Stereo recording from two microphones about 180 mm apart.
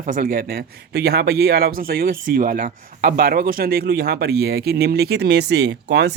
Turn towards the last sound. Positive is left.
turn(degrees=-70)  # may be behind; listen again after turning